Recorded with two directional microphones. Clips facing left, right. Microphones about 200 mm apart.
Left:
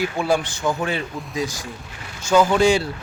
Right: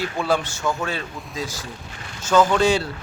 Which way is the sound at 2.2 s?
10° left (ahead or behind).